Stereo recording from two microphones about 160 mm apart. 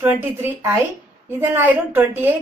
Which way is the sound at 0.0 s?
15° right (ahead or behind).